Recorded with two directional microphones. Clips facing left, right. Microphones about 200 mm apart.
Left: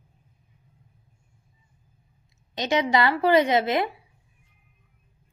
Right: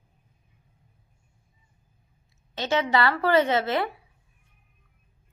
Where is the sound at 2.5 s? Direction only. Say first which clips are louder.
Left 1 dB; 15° left (ahead or behind).